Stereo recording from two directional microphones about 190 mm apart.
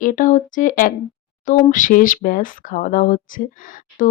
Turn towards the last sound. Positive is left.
turn(degrees=45)  # may be behind; listen again after turning